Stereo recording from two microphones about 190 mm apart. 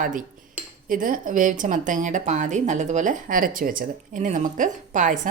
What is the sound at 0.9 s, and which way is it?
Speech, 45° right (ahead or behind).